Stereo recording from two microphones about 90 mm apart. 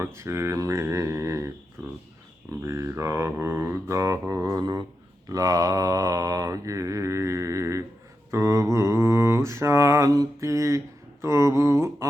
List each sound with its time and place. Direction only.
0.0 s mantra: 30° right (ahead or behind)
2.6 s mantra: 30° right (ahead or behind)